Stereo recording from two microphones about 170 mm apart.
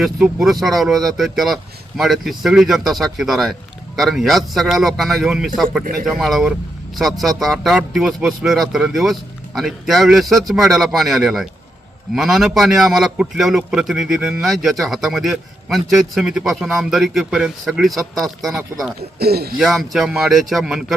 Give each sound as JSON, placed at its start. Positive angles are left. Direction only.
{"t": 0.0, "sound": "a man's voice", "side_deg": 0}
{"t": 5.8, "sound": "speech", "side_deg": -55}
{"t": 6.1, "sound": "a man's voice", "side_deg": 0}
{"t": 19.2, "sound": "speech", "side_deg": -65}
{"t": 19.5, "sound": "a man's voice", "side_deg": 0}